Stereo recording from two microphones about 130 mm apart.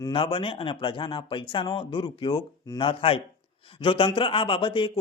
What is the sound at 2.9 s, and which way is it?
A man's voice, 45° left (ahead or behind).